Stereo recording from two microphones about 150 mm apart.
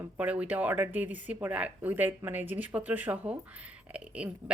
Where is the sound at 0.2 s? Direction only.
10° right (ahead or behind).